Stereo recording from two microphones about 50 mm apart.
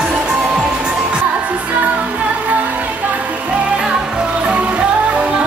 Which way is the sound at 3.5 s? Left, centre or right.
Right.